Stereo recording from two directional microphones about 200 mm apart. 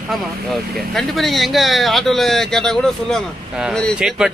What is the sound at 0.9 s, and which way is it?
Speech, centre (ahead or behind).